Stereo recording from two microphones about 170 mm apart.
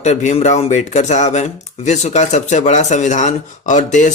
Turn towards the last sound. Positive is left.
turn(degrees=45)  # may be behind; listen again after turning